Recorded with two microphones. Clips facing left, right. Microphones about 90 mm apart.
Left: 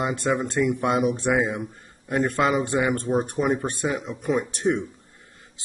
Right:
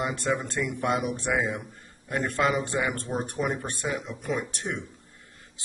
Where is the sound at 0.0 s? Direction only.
25° left (ahead or behind).